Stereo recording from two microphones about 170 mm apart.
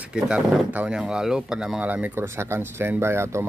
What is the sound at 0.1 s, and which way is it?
Speech, 5° right (ahead or behind).